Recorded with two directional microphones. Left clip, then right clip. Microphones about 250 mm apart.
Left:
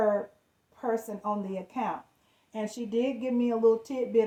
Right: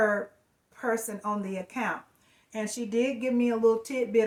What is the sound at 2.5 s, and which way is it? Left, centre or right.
Speech, centre.